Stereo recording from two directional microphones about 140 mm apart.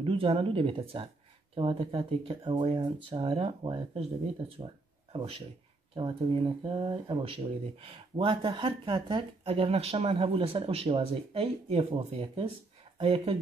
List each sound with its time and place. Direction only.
0.0 s speech: 40° right (ahead or behind)
4.6 s a sound: 40° right (ahead or behind)
5.9 s speech: 40° right (ahead or behind)